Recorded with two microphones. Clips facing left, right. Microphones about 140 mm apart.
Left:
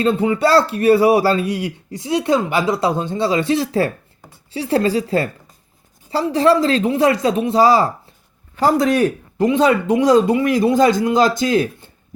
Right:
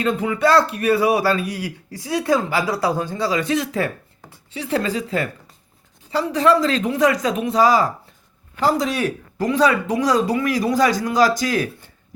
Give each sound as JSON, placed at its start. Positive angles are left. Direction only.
{"t": 0.0, "sound": "speech", "side_deg": 30}
{"t": 8.8, "sound": "speech", "side_deg": 50}
{"t": 9.0, "sound": "speech", "side_deg": 25}